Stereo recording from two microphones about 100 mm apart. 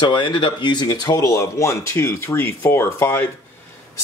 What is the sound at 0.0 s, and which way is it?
Speech, 50° left (ahead or behind).